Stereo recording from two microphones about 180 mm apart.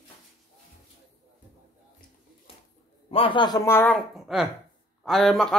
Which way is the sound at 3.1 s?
30° left (ahead or behind).